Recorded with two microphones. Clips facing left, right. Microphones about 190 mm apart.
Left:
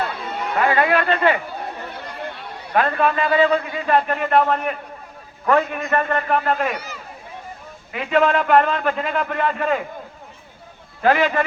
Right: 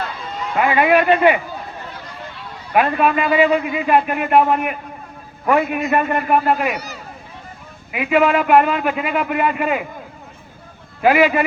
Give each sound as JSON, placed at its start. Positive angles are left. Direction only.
{"t": 0.6, "sound": "a man's voice", "side_deg": -15}
{"t": 1.9, "sound": "a sound", "side_deg": 60}
{"t": 2.7, "sound": "a man's voice", "side_deg": -15}
{"t": 7.9, "sound": "a man's voice", "side_deg": -10}
{"t": 11.0, "sound": "a man's voice", "side_deg": -10}